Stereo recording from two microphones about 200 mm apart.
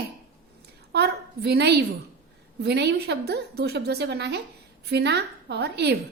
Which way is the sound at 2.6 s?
55° right (ahead or behind).